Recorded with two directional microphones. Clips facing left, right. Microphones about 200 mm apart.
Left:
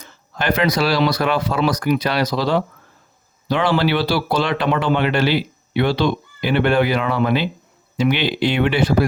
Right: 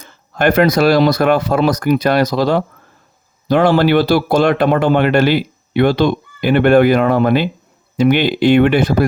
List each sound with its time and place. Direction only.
0.0 s speech: 50° right (ahead or behind)